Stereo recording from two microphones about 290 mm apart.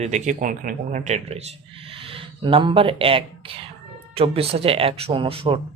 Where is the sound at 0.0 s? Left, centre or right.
Right.